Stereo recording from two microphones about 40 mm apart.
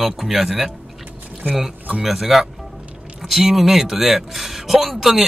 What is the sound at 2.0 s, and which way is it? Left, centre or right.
A man's voice, centre.